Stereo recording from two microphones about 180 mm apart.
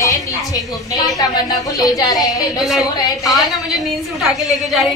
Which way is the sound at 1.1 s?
20° left (ahead or behind).